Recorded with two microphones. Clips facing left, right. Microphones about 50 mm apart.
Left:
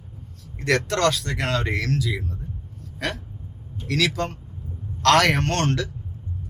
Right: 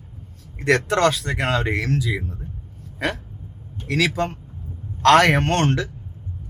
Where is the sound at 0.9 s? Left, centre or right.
Centre.